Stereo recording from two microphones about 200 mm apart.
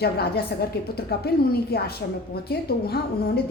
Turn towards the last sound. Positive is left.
turn(degrees=50)  # may be behind; listen again after turning